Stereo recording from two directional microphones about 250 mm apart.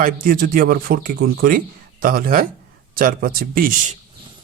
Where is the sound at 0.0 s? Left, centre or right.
Right.